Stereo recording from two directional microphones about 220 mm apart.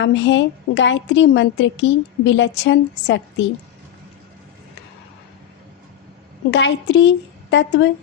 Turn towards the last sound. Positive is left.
turn(degrees=55)  # may be behind; listen again after turning